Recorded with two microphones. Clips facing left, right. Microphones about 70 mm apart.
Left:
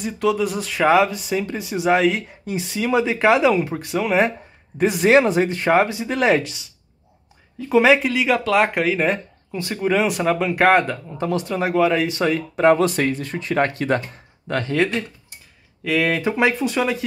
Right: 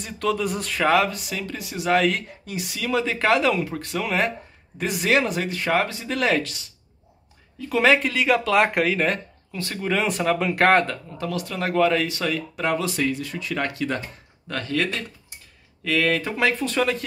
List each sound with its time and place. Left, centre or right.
0.0 s speech: centre
1.1 s speech: left
2.0 s speech: centre
2.4 s speech: left
3.0 s speech: centre
7.7 s speech: centre
11.1 s speech: left
14.5 s speech: left
15.8 s speech: centre